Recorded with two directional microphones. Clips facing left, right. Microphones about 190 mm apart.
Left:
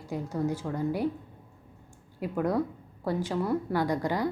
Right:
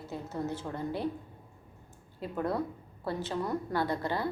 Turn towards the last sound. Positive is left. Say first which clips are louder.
# left 4 dB
turn(degrees=15)  # may be behind; listen again after turning